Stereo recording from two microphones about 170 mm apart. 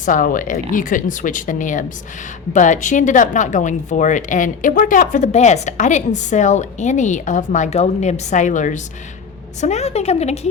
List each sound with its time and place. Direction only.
0.0 s a woman's voice: 50° left (ahead or behind)